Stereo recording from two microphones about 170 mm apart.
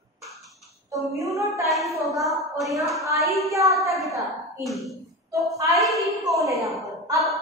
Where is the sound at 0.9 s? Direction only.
20° right (ahead or behind).